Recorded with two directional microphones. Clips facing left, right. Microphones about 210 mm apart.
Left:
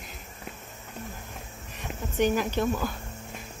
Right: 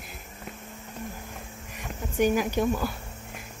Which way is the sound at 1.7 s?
10° right (ahead or behind).